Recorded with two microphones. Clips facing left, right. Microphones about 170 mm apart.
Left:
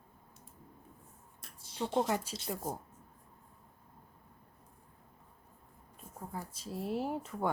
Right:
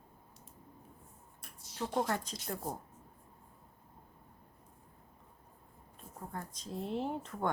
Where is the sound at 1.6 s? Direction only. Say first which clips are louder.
Left 2 dB; 25° left (ahead or behind).